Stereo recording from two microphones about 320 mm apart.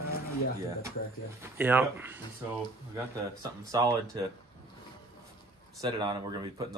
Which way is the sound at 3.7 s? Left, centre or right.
Centre.